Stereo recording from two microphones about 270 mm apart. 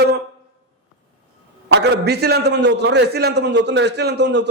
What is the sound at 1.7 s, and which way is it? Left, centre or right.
A man's voice, right.